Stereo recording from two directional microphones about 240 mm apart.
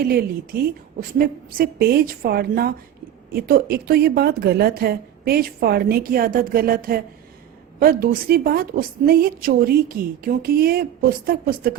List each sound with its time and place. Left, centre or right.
0.0 s a woman's voice: right